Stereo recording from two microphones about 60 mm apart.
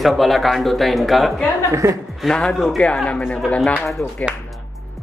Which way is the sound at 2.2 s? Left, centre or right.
Centre.